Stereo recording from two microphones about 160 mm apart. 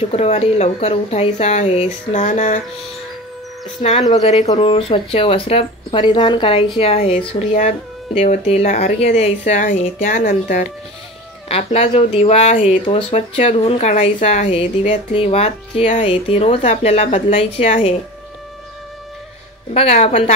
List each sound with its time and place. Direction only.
0.1 s speech: 40° left (ahead or behind)
4.1 s speech: 45° left (ahead or behind)
11.4 s speech: 40° left (ahead or behind)
19.7 s speech: 40° left (ahead or behind)